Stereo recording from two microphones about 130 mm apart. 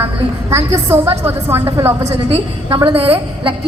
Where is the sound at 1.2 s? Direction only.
15° right (ahead or behind).